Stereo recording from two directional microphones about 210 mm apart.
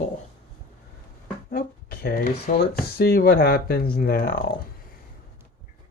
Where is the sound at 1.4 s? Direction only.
45° left (ahead or behind).